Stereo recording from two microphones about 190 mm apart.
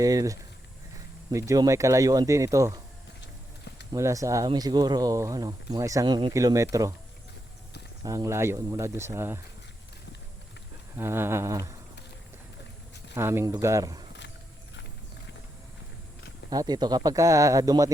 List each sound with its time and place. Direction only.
0.0 s speech: 20° right (ahead or behind)
3.9 s speech: 15° right (ahead or behind)
8.0 s speech: 15° right (ahead or behind)
10.9 s speech: 15° right (ahead or behind)
13.1 s speech: 15° right (ahead or behind)
16.5 s speech: 20° right (ahead or behind)